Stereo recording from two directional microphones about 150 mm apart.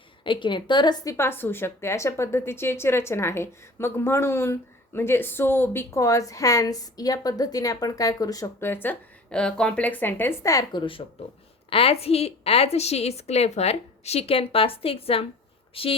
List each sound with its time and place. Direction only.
0.3 s a woman's voice: 35° left (ahead or behind)
1.1 s a woman's voice: 15° left (ahead or behind); by 16.0 s 40° left (ahead or behind)